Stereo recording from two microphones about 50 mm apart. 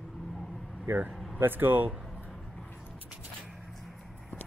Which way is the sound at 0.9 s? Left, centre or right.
Right.